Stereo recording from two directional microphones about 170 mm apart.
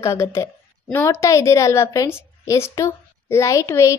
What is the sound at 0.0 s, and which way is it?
A child's voice, 15° left (ahead or behind).